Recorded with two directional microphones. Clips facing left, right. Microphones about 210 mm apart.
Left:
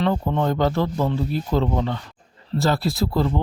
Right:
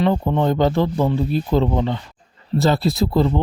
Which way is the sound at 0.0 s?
15° right (ahead or behind).